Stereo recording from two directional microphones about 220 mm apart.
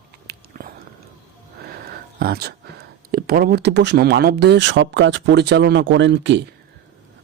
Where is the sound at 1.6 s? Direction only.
45° right (ahead or behind).